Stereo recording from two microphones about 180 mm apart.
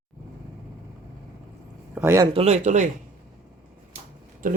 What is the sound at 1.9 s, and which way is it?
Speech, 15° right (ahead or behind).